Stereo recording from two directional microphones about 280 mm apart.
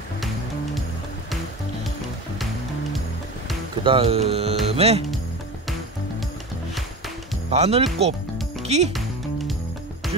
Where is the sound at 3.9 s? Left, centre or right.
Centre.